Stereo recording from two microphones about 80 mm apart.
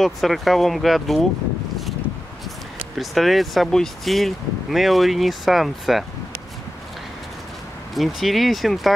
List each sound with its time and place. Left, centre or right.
0.0 s speech: centre
3.0 s speech: centre
7.9 s speech: centre